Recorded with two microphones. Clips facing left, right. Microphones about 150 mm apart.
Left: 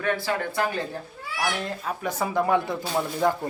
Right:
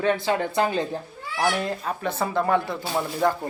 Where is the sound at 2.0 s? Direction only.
10° left (ahead or behind).